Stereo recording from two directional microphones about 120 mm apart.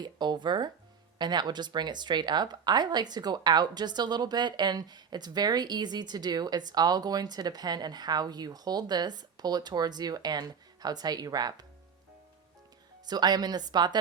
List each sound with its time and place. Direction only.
0.0 s speech: 40° right (ahead or behind)
13.1 s speech: 35° right (ahead or behind)